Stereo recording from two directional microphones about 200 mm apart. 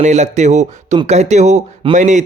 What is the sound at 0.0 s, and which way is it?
A man's voice, 35° right (ahead or behind).